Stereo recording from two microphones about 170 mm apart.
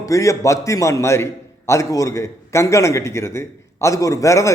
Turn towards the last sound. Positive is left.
turn(degrees=15)  # may be behind; listen again after turning